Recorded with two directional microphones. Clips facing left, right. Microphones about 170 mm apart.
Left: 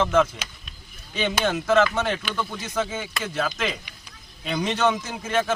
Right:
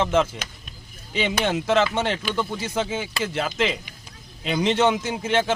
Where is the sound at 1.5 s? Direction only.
25° right (ahead or behind).